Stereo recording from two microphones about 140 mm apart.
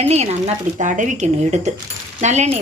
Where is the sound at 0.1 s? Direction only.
50° right (ahead or behind).